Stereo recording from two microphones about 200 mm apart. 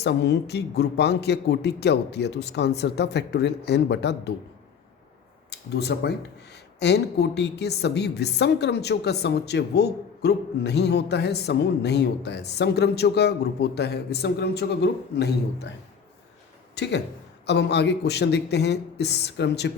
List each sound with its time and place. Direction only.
0.0 s a woman's voice: 55° left (ahead or behind)
5.5 s a woman's voice: 55° left (ahead or behind)
16.7 s a woman's voice: 60° left (ahead or behind)